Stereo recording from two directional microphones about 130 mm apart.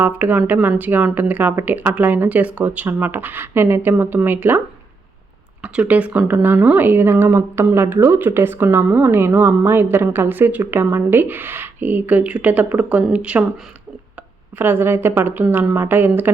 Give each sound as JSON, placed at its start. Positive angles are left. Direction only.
{"t": 0.0, "sound": "speech", "side_deg": -15}
{"t": 5.6, "sound": "speech", "side_deg": -10}
{"t": 14.6, "sound": "speech", "side_deg": -15}